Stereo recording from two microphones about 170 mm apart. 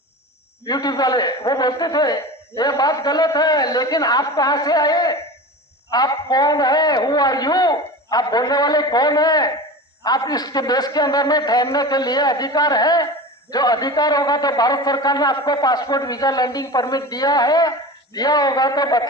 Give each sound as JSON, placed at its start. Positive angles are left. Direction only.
{"t": 0.6, "sound": "a man's voice", "side_deg": 20}